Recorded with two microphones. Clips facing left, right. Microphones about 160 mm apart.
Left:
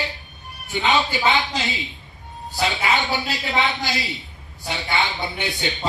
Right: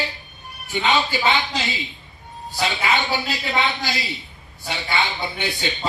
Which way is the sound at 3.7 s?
20° left (ahead or behind).